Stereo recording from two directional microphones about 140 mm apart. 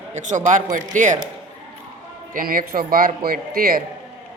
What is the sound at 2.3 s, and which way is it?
A man's voice, 85° right.